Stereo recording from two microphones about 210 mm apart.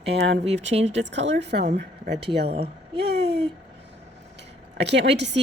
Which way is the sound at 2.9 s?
50° right (ahead or behind).